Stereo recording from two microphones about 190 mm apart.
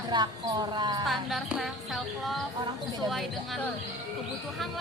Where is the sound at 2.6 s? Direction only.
20° right (ahead or behind).